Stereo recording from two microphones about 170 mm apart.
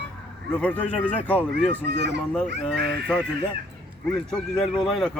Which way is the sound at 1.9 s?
90° right.